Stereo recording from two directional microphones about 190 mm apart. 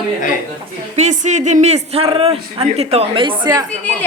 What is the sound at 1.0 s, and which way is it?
A man's voice, 40° right (ahead or behind).